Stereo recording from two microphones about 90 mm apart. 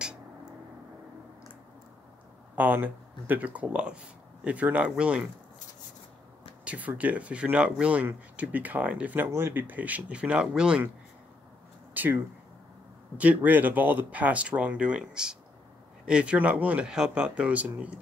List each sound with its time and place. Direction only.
2.5 s speech: 20° right (ahead or behind)
6.6 s speech: 15° right (ahead or behind)
11.9 s a sound: 20° right (ahead or behind)
13.2 s speech: 15° right (ahead or behind)